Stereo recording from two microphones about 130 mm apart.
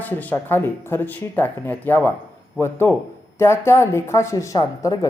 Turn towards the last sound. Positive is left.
turn(degrees=25)  # may be behind; listen again after turning